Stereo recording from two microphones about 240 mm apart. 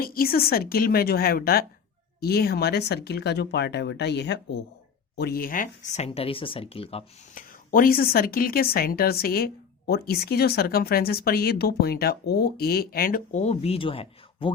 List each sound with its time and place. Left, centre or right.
0.0 s speech: left
7.7 s speech: left